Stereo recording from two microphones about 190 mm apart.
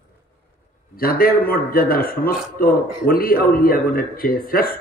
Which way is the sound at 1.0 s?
50° left (ahead or behind).